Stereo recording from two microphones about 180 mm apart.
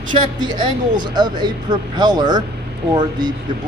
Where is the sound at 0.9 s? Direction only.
25° right (ahead or behind).